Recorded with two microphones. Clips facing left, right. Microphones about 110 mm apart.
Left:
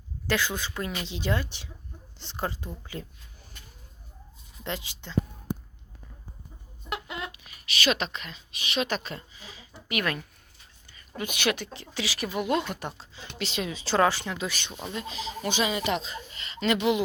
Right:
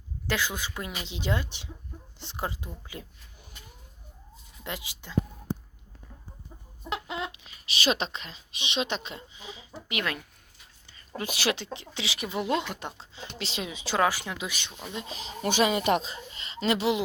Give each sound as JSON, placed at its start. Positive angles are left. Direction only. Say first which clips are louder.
{"t": 0.3, "sound": "a woman's voice", "louder": "left 2 dB", "side_deg": -15}
{"t": 4.6, "sound": "a woman's voice", "louder": "left 3 dB", "side_deg": -15}
{"t": 6.9, "sound": "chicken", "louder": "right 2 dB", "side_deg": -25}
{"t": 7.8, "sound": "a woman's voice", "louder": "even", "side_deg": -30}
{"t": 10.8, "sound": "a woman's voice", "louder": "even", "side_deg": -30}
{"t": 13.7, "sound": "a woman's voice", "louder": "left 2 dB", "side_deg": -15}
{"t": 15.1, "sound": "speech", "louder": "right 3 dB", "side_deg": -45}
{"t": 16.0, "sound": "speech", "louder": "left 1 dB", "side_deg": -30}